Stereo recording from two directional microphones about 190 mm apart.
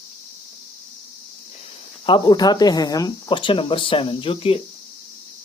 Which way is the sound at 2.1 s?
25° left (ahead or behind).